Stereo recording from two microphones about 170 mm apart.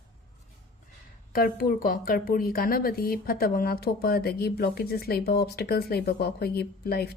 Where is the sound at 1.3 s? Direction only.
60° left (ahead or behind).